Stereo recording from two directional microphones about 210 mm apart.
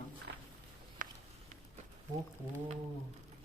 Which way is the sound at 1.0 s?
40° right (ahead or behind).